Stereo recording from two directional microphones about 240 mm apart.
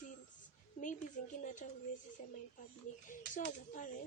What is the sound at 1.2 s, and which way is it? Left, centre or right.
A woman's voice, left.